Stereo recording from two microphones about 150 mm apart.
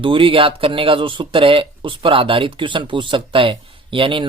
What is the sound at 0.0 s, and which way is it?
Speech, 35° right (ahead or behind).